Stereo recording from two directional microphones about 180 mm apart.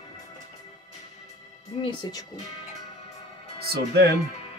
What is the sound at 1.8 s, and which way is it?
Speech, 25° left (ahead or behind).